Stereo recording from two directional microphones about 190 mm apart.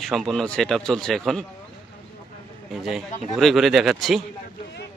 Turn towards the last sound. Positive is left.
turn(degrees=0)  # may be behind; listen again after turning